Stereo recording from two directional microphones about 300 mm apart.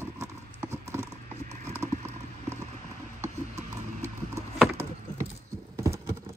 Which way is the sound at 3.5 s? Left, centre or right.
Right.